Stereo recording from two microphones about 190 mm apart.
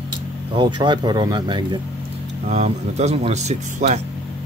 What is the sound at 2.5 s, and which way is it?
Speech, 35° right (ahead or behind).